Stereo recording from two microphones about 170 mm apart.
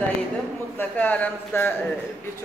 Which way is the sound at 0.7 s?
10° left (ahead or behind).